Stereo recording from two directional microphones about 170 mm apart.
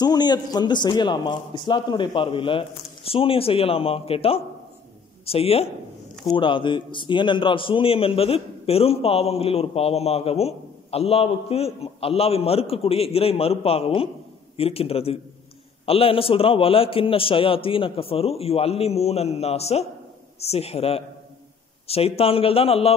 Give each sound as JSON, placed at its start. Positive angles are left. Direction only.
{"t": 0.0, "sound": "a man's voice", "side_deg": 25}